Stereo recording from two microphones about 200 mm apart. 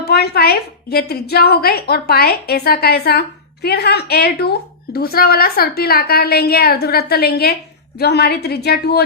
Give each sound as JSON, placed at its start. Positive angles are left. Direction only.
{"t": 0.0, "sound": "a woman's voice", "side_deg": 55}